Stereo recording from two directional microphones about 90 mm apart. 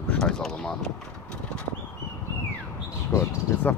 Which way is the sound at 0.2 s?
5° left (ahead or behind).